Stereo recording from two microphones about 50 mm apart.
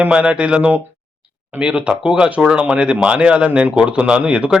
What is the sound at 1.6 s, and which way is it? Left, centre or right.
Speech, right.